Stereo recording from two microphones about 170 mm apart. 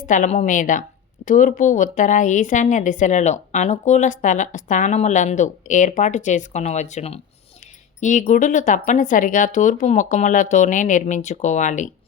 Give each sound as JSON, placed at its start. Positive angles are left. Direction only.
{"t": 0.0, "sound": "speech", "side_deg": 50}
{"t": 8.3, "sound": "speech", "side_deg": 50}